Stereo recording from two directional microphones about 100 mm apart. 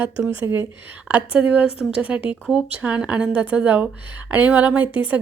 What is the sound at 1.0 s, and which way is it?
Speech, 15° right (ahead or behind).